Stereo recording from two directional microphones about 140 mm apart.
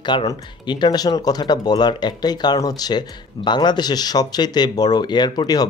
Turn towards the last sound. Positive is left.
turn(degrees=30)  # may be behind; listen again after turning